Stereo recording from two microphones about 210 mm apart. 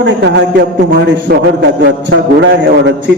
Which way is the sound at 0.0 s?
55° right (ahead or behind).